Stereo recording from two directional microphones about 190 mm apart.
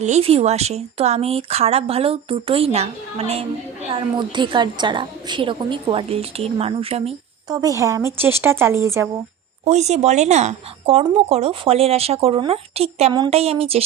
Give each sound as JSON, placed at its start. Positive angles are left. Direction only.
{"t": 0.0, "sound": "a woman's voice", "side_deg": -35}
{"t": 7.5, "sound": "speech", "side_deg": -20}
{"t": 9.6, "sound": "speech", "side_deg": -35}